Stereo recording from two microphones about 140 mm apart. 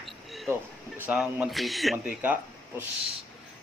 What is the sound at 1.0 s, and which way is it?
Speech, 10° right (ahead or behind).